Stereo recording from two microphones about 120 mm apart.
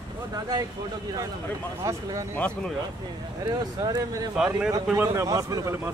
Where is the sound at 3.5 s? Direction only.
35° right (ahead or behind).